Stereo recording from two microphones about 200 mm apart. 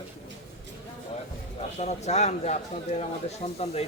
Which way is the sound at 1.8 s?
35° left (ahead or behind).